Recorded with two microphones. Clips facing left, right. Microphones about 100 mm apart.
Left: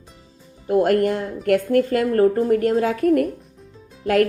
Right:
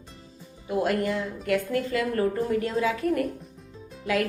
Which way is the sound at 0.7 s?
55° left (ahead or behind).